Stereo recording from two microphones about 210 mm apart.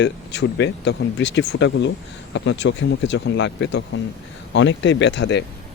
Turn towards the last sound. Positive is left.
turn(degrees=55)  # may be behind; listen again after turning